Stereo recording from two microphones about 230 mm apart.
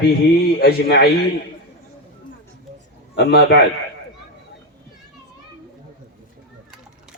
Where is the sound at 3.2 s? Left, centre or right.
Left.